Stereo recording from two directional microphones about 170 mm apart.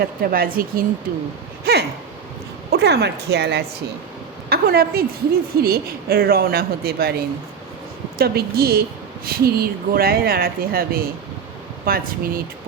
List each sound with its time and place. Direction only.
0.0 s speech: 60° right (ahead or behind)
1.7 s a sound: 70° right (ahead or behind)
2.6 s speech: 75° right (ahead or behind)
4.4 s speech: 65° right (ahead or behind)
8.2 s speech: 65° right (ahead or behind)